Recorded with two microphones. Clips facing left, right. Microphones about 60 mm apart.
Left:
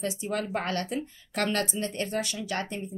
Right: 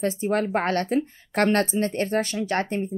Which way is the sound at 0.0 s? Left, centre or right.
Right.